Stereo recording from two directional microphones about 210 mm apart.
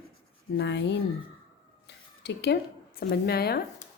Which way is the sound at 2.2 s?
50° left (ahead or behind).